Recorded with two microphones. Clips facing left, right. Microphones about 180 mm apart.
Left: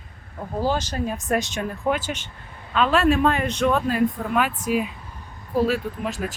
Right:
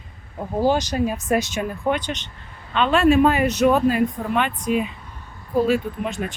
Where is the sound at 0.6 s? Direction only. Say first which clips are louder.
Right 5 dB; 15° right (ahead or behind).